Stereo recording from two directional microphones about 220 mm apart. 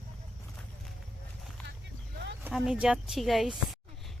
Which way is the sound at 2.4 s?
5° right (ahead or behind).